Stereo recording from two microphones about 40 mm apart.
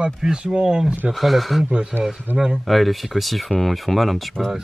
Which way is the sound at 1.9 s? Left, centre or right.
Right.